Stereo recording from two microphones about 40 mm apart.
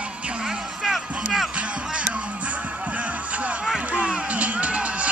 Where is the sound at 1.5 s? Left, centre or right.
Right.